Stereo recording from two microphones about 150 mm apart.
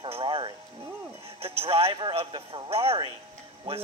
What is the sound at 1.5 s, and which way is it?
Speech, 40° right (ahead or behind).